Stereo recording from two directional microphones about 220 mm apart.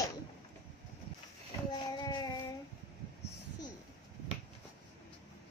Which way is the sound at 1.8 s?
15° left (ahead or behind).